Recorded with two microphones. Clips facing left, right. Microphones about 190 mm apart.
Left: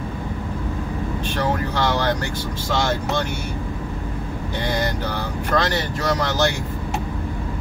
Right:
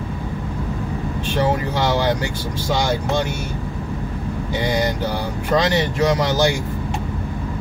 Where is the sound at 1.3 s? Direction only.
15° right (ahead or behind).